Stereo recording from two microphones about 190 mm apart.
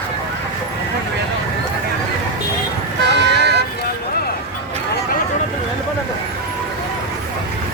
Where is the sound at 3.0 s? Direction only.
65° right (ahead or behind).